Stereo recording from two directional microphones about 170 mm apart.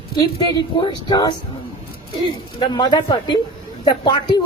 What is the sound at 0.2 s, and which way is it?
A woman's voice, 25° left (ahead or behind).